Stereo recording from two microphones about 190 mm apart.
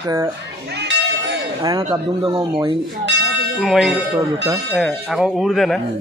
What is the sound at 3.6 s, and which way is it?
Speech, centre (ahead or behind).